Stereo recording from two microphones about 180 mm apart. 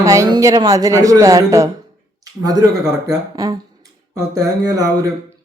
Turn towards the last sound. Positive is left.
turn(degrees=-20)  # may be behind; listen again after turning